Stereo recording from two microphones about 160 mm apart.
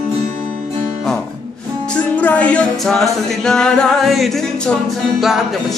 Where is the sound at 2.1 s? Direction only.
10° left (ahead or behind).